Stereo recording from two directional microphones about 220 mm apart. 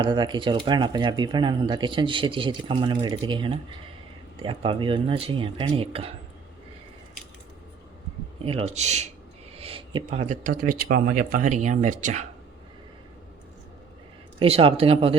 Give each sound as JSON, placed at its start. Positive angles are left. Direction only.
{"t": 0.0, "sound": "speech", "side_deg": -20}
{"t": 8.4, "sound": "speech", "side_deg": -25}
{"t": 14.3, "sound": "speech", "side_deg": -25}